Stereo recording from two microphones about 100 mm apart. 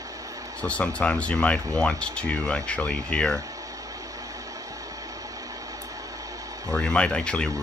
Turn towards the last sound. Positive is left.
turn(degrees=10)  # may be behind; listen again after turning